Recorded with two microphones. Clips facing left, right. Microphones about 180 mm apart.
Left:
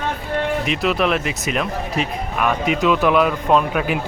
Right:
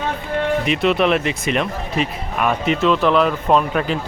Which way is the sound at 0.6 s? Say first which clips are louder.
Right 2 dB; centre (ahead or behind).